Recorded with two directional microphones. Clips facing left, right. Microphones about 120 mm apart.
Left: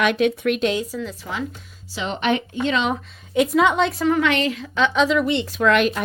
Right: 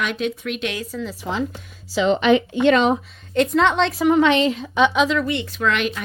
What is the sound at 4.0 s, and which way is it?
Speech, 20° right (ahead or behind).